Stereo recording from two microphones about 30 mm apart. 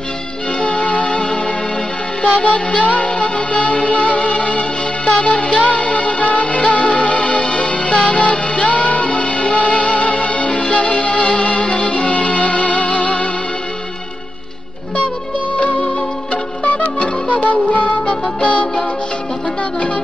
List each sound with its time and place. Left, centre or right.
0.6 s music: left
2.2 s music: left
16.6 s music: left